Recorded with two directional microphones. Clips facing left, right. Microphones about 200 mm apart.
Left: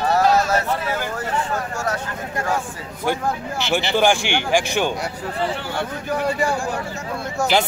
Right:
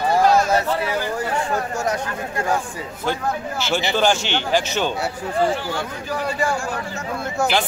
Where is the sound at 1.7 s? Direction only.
15° right (ahead or behind).